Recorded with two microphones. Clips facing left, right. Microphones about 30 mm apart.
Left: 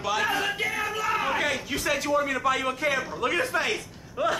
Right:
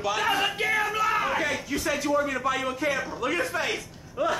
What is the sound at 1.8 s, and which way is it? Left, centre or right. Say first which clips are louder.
Speech: even; left.